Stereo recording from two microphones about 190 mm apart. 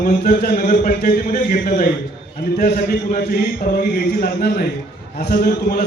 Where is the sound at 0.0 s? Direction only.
45° left (ahead or behind).